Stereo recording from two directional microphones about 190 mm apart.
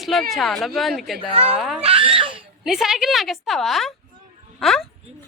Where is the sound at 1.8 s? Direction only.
30° right (ahead or behind).